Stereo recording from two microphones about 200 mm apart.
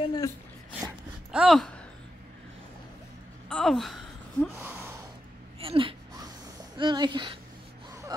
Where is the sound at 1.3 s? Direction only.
Centre (ahead or behind).